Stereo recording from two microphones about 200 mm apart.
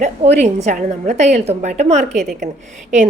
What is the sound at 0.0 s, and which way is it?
A woman's voice, 35° right (ahead or behind).